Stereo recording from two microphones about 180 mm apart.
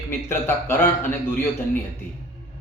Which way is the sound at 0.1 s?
15° left (ahead or behind).